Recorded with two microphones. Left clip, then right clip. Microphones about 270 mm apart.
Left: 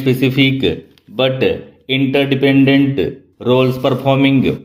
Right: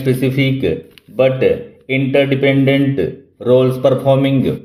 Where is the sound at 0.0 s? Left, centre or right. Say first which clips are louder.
Left 2 dB; left.